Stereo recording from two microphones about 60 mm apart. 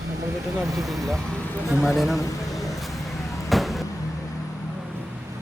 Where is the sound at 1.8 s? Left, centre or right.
Centre.